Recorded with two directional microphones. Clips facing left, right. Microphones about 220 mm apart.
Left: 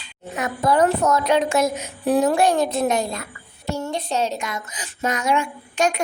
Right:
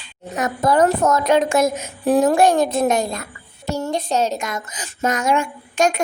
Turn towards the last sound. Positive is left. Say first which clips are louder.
# right 3 dB
turn(degrees=-45)  # may be behind; listen again after turning